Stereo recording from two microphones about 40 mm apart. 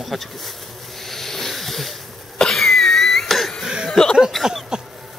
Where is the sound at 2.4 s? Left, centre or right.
Centre.